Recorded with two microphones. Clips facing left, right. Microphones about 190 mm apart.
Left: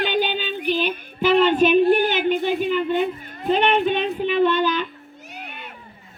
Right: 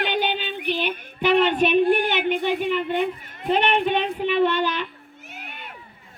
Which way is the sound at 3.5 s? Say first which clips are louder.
Left 2 dB; 70° right (ahead or behind).